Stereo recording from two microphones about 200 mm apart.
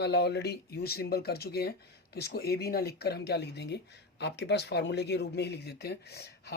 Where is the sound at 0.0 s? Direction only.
55° left (ahead or behind).